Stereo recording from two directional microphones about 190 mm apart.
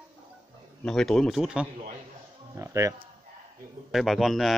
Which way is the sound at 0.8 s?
5° left (ahead or behind).